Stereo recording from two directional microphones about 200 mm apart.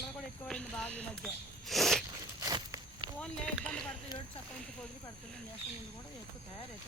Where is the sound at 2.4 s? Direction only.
20° right (ahead or behind).